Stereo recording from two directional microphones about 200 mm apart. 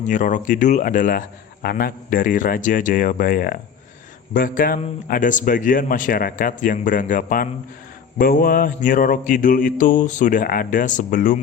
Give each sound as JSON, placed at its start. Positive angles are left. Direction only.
{"t": 0.0, "sound": "mantra", "side_deg": 40}
{"t": 1.6, "sound": "a man's voice", "side_deg": 45}
{"t": 8.2, "sound": "mantra", "side_deg": 45}